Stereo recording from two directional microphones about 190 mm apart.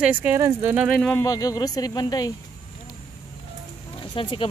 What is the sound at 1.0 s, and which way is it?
Speech, 10° left (ahead or behind).